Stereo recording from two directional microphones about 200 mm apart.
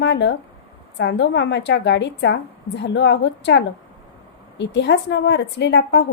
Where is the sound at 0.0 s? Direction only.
60° left (ahead or behind).